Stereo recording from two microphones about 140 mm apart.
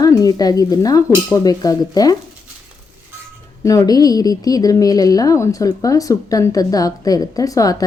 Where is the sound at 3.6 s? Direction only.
25° left (ahead or behind).